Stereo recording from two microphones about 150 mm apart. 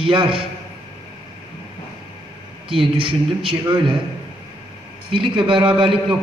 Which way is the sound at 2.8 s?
35° right (ahead or behind).